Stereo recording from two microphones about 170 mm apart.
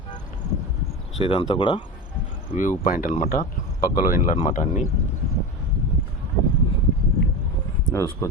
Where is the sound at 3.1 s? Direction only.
45° left (ahead or behind).